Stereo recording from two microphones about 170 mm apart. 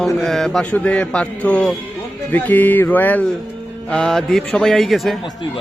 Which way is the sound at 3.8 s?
5° left (ahead or behind).